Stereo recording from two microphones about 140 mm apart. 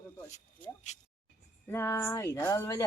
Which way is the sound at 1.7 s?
15° left (ahead or behind).